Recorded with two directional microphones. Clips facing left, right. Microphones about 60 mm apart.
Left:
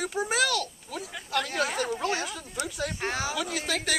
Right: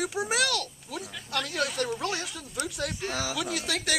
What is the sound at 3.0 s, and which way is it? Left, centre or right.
Speech, left.